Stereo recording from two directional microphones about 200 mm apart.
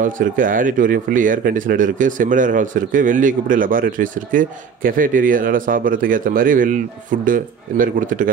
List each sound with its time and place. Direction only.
0.0 s speech: 40° right (ahead or behind)